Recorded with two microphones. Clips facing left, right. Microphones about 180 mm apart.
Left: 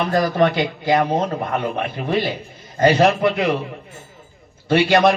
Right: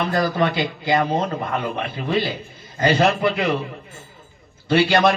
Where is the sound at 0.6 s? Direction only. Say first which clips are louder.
Left 2 dB; centre (ahead or behind).